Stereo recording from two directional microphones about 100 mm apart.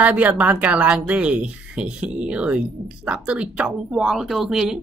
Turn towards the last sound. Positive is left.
turn(degrees=-5)  # may be behind; listen again after turning